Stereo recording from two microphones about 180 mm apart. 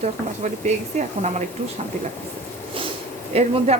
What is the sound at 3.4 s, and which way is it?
Speech, 35° right (ahead or behind).